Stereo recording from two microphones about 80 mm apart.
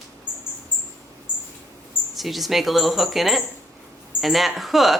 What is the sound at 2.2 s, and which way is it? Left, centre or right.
Speech, centre.